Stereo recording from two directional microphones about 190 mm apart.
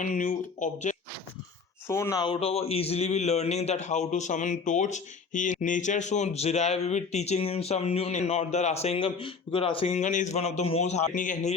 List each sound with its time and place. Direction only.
0.0 s speech: 40° left (ahead or behind)
1.9 s speech: 15° left (ahead or behind); by 11.5 s 45° left (ahead or behind)